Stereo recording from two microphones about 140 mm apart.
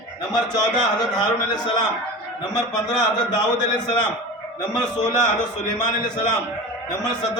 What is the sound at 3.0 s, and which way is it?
Speech, 30° left (ahead or behind).